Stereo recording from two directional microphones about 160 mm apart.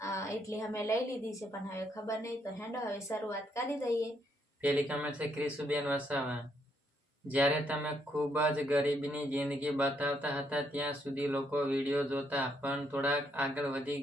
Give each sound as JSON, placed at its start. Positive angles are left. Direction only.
{"t": 0.0, "sound": "a woman's voice", "side_deg": 20}
{"t": 4.6, "sound": "speech", "side_deg": -10}
{"t": 7.3, "sound": "speech", "side_deg": -10}